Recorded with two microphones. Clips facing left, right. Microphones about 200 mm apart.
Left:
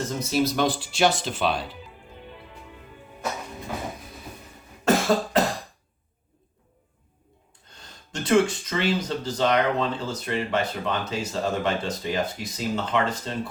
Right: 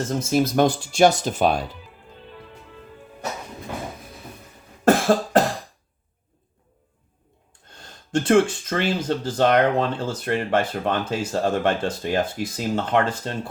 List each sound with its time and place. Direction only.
0.2 s speech: 50° right (ahead or behind)
4.9 s cough: 50° right (ahead or behind)
8.1 s speech: 50° right (ahead or behind)